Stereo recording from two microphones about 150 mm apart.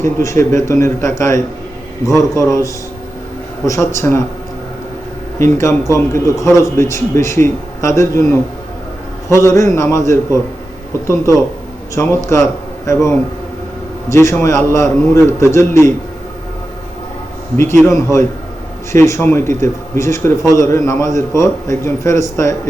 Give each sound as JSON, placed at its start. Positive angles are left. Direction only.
{"t": 0.0, "sound": "speech", "side_deg": 20}
{"t": 3.7, "sound": "speech", "side_deg": 20}
{"t": 5.4, "sound": "speech", "side_deg": 20}
{"t": 9.3, "sound": "speech", "side_deg": 20}
{"t": 11.9, "sound": "speech", "side_deg": 20}
{"t": 17.8, "sound": "speech", "side_deg": 20}